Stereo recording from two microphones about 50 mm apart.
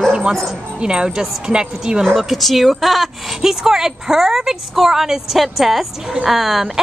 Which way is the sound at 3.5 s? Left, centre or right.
Centre.